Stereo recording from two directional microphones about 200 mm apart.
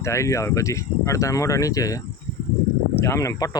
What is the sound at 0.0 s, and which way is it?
Speech, 15° left (ahead or behind).